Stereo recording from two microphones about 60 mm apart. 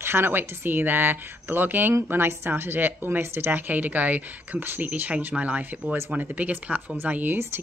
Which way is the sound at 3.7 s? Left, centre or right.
Right.